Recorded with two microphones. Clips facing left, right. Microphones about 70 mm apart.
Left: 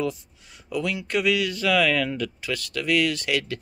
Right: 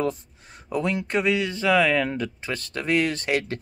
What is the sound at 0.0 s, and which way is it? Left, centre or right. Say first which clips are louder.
Speech: right 2 dB; right.